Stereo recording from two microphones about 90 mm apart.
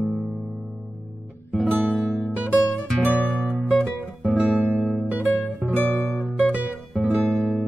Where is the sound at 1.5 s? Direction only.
5° left (ahead or behind).